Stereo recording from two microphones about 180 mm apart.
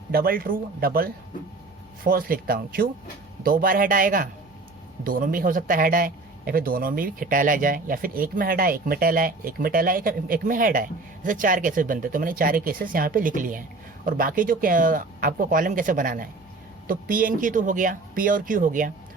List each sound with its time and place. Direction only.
0.1 s a man's voice: 55° right (ahead or behind)